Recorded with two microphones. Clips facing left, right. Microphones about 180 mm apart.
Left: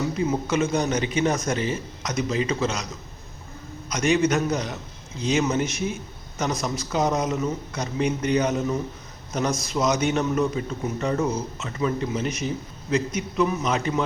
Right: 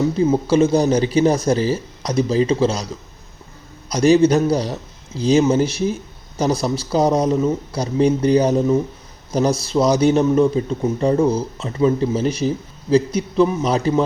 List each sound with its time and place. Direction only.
0.0 s a man's voice: 30° right (ahead or behind)
3.8 s a man's voice: 35° right (ahead or behind)